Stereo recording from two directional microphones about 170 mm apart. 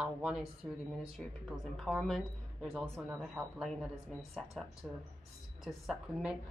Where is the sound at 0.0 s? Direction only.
5° right (ahead or behind).